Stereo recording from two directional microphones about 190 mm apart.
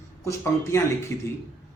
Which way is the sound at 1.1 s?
15° left (ahead or behind).